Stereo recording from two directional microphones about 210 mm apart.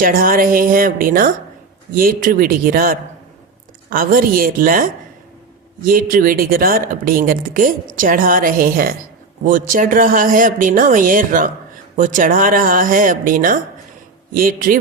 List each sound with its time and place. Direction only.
0.0 s speech: 45° right (ahead or behind)